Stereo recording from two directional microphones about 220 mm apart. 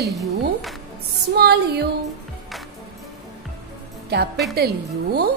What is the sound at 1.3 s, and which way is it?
Speech, 45° right (ahead or behind).